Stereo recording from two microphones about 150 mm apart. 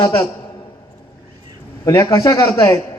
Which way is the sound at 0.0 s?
25° left (ahead or behind).